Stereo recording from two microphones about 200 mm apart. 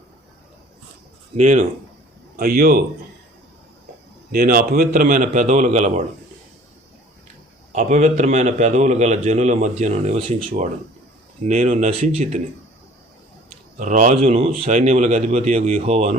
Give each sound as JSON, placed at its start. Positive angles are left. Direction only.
{"t": 1.4, "sound": "a man's voice", "side_deg": -35}
{"t": 2.3, "sound": "a man's voice", "side_deg": -45}
{"t": 4.3, "sound": "a man's voice", "side_deg": -45}
{"t": 7.7, "sound": "a man's voice", "side_deg": -35}
{"t": 11.4, "sound": "a man's voice", "side_deg": -40}
{"t": 13.7, "sound": "a man's voice", "side_deg": -35}